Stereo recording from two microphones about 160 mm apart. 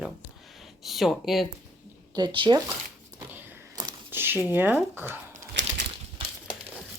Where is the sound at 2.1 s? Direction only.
30° right (ahead or behind).